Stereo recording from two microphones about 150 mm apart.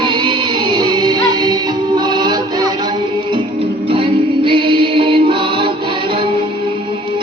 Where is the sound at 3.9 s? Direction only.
35° right (ahead or behind).